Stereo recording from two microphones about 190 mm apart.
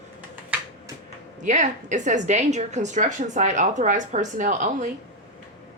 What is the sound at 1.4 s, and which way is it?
A woman's voice, 40° right (ahead or behind).